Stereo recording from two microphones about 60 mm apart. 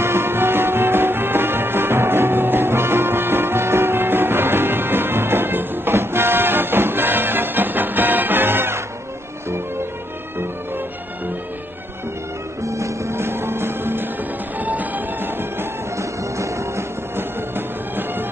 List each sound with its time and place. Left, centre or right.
0.0 s music: right
12.6 s music: right
14.6 s music: right
16.0 s music: right
17.1 s music: right